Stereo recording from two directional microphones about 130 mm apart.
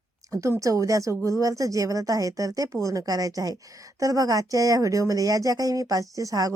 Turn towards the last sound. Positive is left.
turn(degrees=-25)  # may be behind; listen again after turning